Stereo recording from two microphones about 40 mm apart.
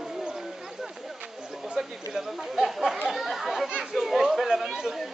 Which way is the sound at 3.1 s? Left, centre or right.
Centre.